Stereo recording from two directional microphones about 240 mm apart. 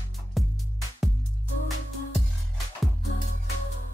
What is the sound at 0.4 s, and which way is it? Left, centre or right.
Music, centre.